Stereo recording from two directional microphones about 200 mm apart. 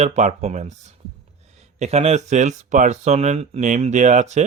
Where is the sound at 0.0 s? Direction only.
35° right (ahead or behind).